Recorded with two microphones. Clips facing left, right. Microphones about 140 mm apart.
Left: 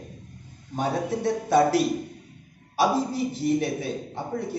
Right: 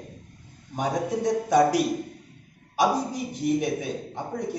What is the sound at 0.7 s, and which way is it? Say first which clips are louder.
A man's voice: even; 15° right (ahead or behind).